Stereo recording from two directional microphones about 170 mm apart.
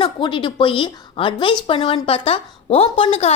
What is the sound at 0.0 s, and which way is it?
A woman's voice, 30° left (ahead or behind).